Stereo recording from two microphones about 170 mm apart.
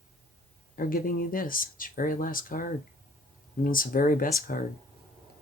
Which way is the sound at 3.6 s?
55° left (ahead or behind).